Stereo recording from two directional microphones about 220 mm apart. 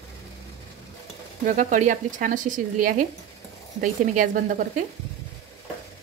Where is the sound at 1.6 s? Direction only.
35° right (ahead or behind).